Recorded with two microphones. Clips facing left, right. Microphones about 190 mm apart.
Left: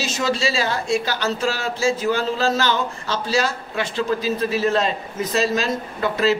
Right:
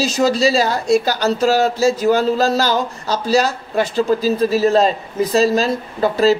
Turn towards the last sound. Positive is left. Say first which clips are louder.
# right 5 dB
turn(degrees=-35)  # may be behind; listen again after turning